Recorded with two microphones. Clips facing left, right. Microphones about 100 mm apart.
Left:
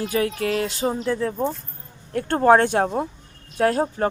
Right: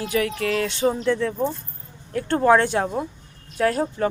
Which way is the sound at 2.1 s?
45° left (ahead or behind).